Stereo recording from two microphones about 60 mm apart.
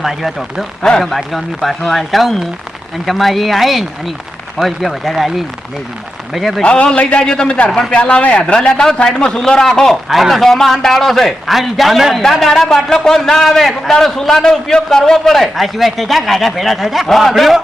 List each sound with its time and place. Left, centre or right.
0.0 s a man's voice: centre
0.8 s a man's voice: centre
1.0 s a man's voice: centre
6.3 s a man's voice: centre
6.6 s a man's voice: centre